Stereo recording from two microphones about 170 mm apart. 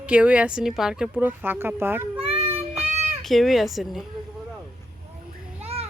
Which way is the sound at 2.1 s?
35° right (ahead or behind).